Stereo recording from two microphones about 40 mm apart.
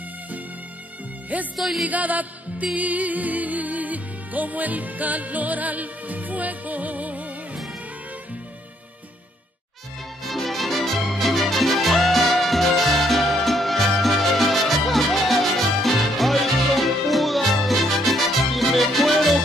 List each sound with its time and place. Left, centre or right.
1.3 s music: right
10.2 s music: centre